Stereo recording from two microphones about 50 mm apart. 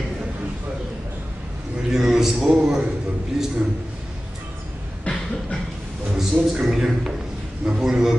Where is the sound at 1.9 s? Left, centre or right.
Centre.